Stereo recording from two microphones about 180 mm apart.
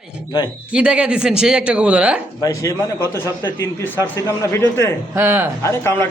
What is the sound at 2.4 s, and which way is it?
A man's voice, 20° left (ahead or behind).